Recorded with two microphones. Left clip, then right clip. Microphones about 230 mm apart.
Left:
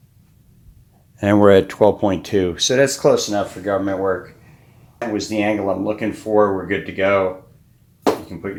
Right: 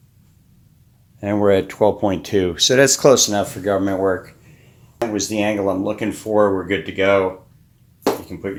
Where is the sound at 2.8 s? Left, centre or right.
Right.